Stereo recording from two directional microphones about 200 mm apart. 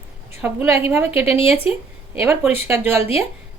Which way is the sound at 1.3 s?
30° left (ahead or behind).